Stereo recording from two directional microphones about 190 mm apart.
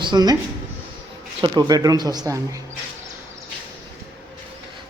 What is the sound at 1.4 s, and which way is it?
Speech, 20° right (ahead or behind).